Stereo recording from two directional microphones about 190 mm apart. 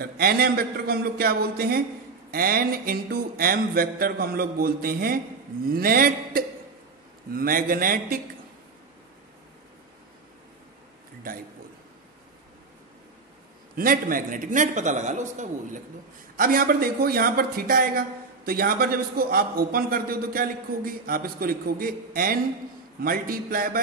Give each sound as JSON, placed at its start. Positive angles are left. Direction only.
{"t": 0.0, "sound": "speech", "side_deg": -50}
{"t": 13.7, "sound": "speech", "side_deg": -45}